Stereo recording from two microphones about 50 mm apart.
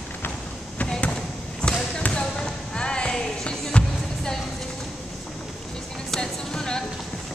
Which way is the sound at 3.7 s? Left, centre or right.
Centre.